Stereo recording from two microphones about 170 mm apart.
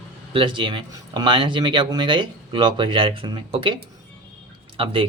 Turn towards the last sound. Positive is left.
turn(degrees=-30)  # may be behind; listen again after turning